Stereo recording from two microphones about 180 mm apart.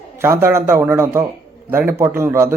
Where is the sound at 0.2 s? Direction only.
15° right (ahead or behind).